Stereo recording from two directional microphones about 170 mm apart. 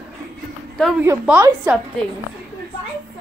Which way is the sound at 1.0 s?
15° right (ahead or behind).